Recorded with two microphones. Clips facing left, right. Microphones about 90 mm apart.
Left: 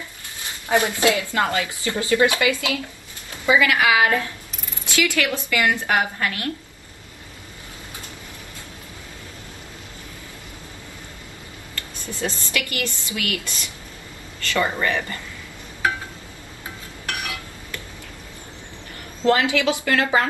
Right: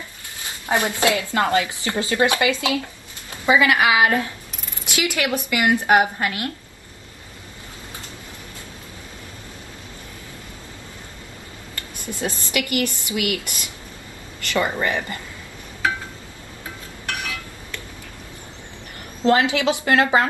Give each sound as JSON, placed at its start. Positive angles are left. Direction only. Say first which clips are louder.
{"t": 0.7, "sound": "speech", "louder": "left 1 dB", "side_deg": -20}
{"t": 12.0, "sound": "a woman's voice", "louder": "right 1 dB", "side_deg": -15}
{"t": 19.2, "sound": "speech", "louder": "right 1 dB", "side_deg": -20}